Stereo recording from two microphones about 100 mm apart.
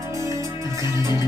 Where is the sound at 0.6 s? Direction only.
30° right (ahead or behind).